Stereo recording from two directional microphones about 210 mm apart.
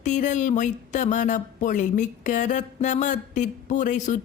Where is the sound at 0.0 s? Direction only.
35° left (ahead or behind).